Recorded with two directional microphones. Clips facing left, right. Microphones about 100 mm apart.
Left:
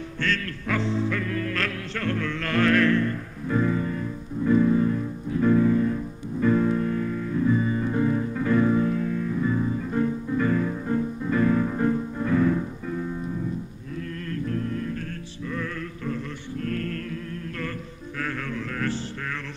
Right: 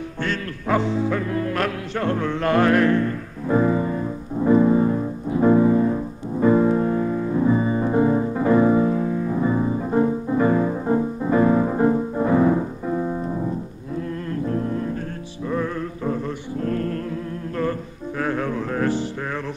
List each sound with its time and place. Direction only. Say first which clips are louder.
0.7 s music: right 4 dB; 15° right (ahead or behind); by 13.5 s 40° right (ahead or behind)
14.3 s music: right 4 dB; 25° right (ahead or behind)